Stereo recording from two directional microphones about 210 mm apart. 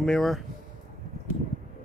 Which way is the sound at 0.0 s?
Centre (ahead or behind).